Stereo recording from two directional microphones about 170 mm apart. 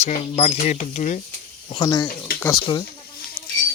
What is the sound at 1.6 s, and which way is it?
Speech, 30° left (ahead or behind).